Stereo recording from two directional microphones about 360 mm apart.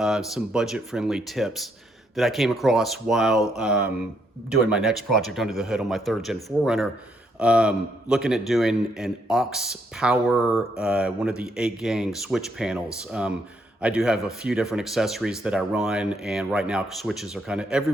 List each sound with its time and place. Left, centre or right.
0.0 s a man's voice: centre